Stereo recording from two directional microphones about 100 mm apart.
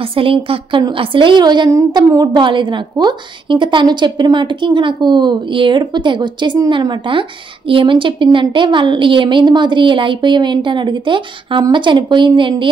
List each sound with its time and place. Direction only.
0.1 s a woman's voice: 65° right (ahead or behind)